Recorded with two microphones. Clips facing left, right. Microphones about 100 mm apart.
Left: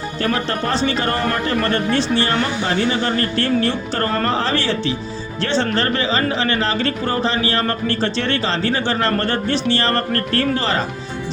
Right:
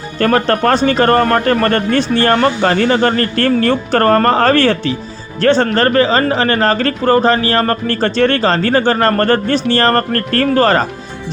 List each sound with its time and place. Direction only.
0.2 s a man's voice: 55° right (ahead or behind)